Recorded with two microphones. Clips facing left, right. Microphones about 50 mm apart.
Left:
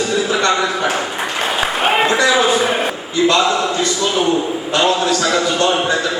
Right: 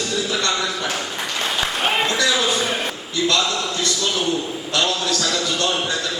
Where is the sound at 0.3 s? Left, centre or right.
Left.